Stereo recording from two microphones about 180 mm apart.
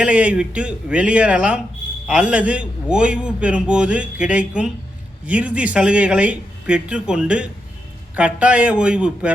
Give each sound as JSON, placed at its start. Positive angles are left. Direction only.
{"t": 0.0, "sound": "a man's voice", "side_deg": -5}